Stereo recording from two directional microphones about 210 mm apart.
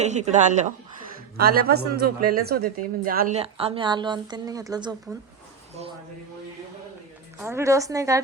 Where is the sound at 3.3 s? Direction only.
30° right (ahead or behind).